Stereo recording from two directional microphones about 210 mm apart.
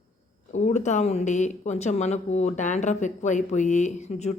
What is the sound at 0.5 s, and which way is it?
Speech, 35° left (ahead or behind).